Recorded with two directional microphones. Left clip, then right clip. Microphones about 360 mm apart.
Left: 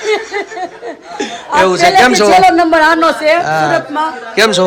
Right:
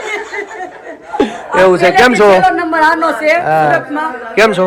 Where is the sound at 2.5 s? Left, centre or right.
Left.